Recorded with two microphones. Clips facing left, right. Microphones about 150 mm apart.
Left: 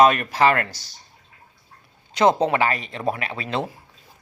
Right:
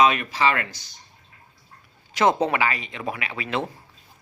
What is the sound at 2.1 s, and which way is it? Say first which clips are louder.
Speech: left 2 dB; 30° left (ahead or behind).